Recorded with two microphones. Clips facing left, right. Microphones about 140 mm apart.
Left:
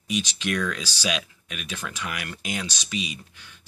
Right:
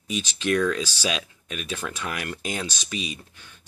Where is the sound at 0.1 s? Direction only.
30° right (ahead or behind).